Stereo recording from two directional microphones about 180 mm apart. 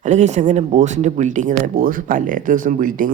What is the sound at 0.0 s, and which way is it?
Speech, 40° right (ahead or behind).